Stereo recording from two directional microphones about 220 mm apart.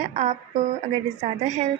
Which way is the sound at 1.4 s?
30° right (ahead or behind).